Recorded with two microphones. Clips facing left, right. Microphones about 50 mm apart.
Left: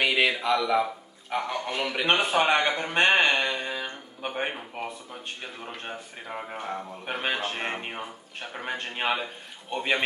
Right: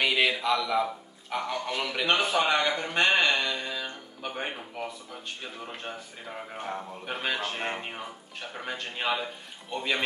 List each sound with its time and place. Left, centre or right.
0.0 s a sound: centre
0.4 s speech: centre
2.0 s speech: left
6.3 s speech: centre
7.3 s speech: left
7.6 s speech: centre